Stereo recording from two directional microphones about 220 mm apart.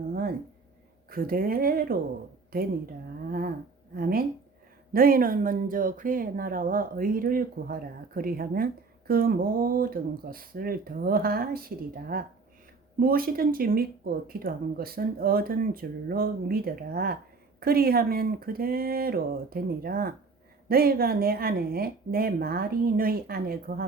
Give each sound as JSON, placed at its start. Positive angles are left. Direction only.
{"t": 1.1, "sound": "speech", "side_deg": -40}
{"t": 3.9, "sound": "speech", "side_deg": -45}